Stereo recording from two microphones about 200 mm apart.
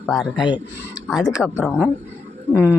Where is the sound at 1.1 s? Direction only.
5° right (ahead or behind).